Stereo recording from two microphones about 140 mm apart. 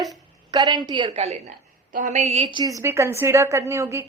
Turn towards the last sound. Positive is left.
turn(degrees=-20)  # may be behind; listen again after turning